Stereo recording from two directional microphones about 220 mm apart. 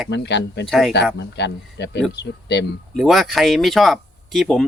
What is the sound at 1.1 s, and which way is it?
Speech, 50° left (ahead or behind).